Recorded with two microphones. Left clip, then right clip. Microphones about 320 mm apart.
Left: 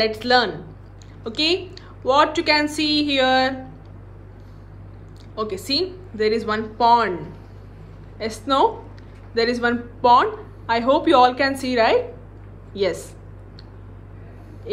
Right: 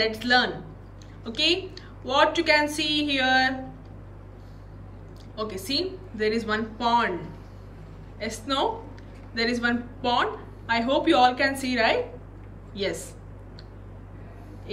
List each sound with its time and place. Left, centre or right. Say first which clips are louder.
0.0 s speech: left 4 dB; centre
5.3 s speech: left 5 dB; centre
8.2 s speech: left 8 dB; centre